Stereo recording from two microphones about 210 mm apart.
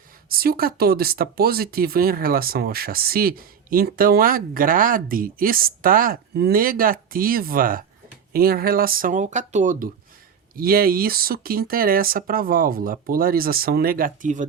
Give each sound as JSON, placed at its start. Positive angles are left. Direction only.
{"t": 0.3, "sound": "speech", "side_deg": -45}